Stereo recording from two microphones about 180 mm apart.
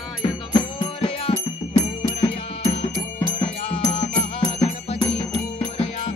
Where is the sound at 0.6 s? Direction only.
30° left (ahead or behind).